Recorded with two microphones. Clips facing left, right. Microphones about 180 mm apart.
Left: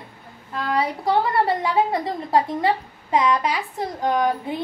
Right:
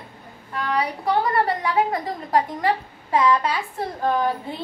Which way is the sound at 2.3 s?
25° left (ahead or behind).